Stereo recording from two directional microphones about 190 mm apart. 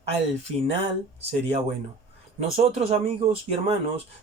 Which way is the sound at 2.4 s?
35° right (ahead or behind).